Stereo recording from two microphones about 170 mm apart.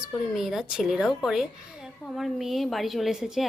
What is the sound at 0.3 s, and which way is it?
A woman's voice, centre (ahead or behind).